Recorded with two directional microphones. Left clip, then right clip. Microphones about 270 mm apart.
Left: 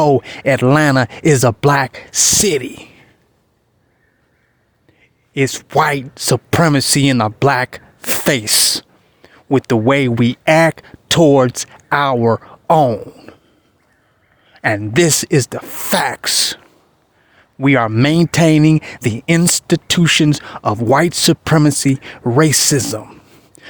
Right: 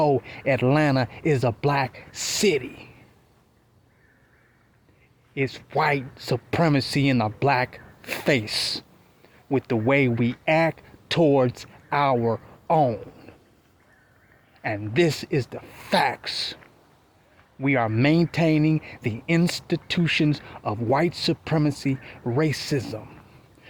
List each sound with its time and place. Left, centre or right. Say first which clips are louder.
0.0 s speech: left 9 dB; left
5.3 s speech: left 11 dB; left
14.5 s speech: left 10 dB; left
17.6 s speech: left 9 dB; left